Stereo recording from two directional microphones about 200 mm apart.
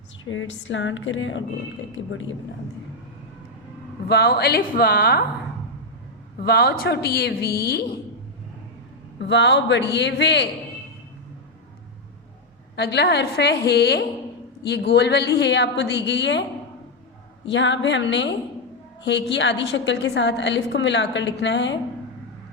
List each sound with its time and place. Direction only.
0.3 s speech: 70° left (ahead or behind)
4.1 s a woman's voice: 55° left (ahead or behind)
6.4 s a woman's voice: 50° left (ahead or behind)
9.1 s a woman's voice: 60° left (ahead or behind)
12.7 s a woman's voice: 55° left (ahead or behind)
17.4 s a woman's voice: 65° left (ahead or behind)